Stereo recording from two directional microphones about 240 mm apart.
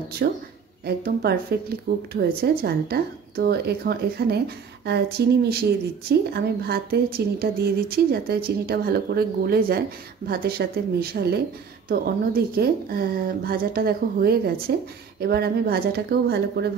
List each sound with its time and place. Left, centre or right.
0.2 s a woman's voice: right